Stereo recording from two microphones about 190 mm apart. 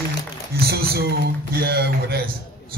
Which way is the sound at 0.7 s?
55° right (ahead or behind).